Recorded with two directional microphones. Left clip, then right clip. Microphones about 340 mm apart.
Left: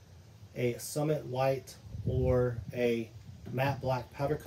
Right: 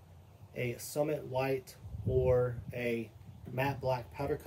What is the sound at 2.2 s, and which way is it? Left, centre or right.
Speech, left.